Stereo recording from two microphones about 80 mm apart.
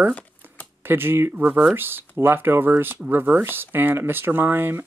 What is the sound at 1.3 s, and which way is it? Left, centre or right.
Speech, centre.